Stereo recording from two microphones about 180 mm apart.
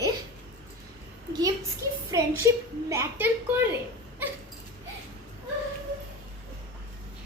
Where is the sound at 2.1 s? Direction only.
15° right (ahead or behind).